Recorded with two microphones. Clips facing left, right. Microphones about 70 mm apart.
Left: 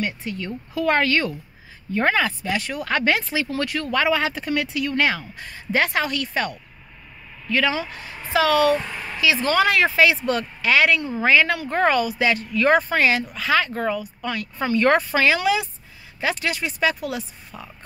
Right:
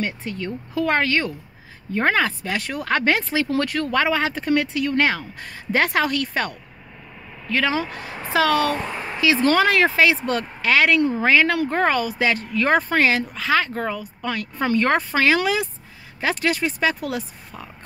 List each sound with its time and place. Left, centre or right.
0.0 s speech: right
0.8 s a woman's voice: right
2.0 s speech: right
8.9 s a sound: right
9.4 s speech: right
11.7 s speech: right
14.8 s speech: right